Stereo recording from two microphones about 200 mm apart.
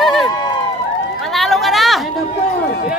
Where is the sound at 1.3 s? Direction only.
Centre (ahead or behind).